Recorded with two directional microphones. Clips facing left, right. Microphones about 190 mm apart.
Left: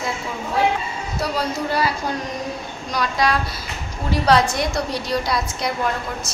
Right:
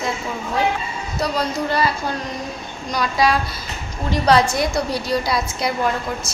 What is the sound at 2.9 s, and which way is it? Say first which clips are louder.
A woman's voice: right 2 dB; centre (ahead or behind).